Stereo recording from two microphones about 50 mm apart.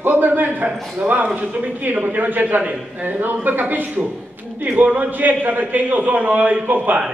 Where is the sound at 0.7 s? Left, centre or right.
Right.